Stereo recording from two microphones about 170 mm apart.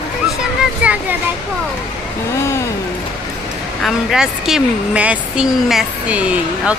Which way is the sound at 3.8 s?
Centre (ahead or behind).